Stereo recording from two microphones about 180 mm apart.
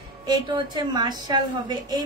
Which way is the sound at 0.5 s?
25° right (ahead or behind).